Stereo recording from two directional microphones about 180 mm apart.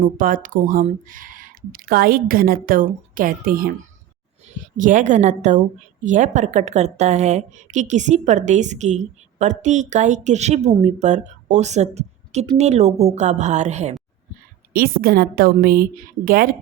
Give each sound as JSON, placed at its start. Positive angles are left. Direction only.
{"t": 0.0, "sound": "a woman's voice", "side_deg": -50}
{"t": 14.7, "sound": "speech", "side_deg": -55}